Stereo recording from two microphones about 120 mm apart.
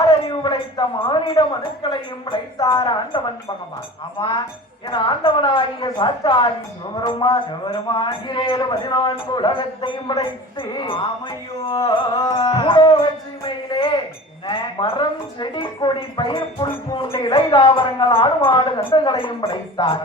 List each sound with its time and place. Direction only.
0.1 s a woman's voice: 40° left (ahead or behind)
12.4 s speech: 45° left (ahead or behind)
14.4 s speech: 45° left (ahead or behind)